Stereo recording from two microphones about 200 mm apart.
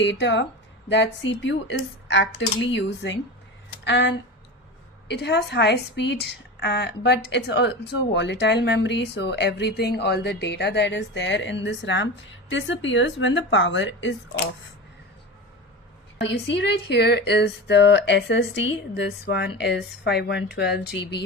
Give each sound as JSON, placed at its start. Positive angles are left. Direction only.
{"t": 0.0, "sound": "a woman's voice", "side_deg": 65}
{"t": 16.2, "sound": "a woman's voice", "side_deg": 60}